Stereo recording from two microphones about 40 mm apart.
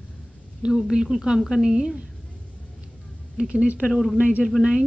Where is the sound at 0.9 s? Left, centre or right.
Centre.